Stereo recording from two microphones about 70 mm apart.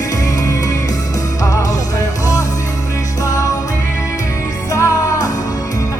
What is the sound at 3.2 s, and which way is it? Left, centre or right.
Music, left.